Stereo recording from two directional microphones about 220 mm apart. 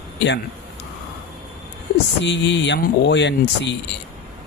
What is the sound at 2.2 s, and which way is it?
Speech, 55° left (ahead or behind).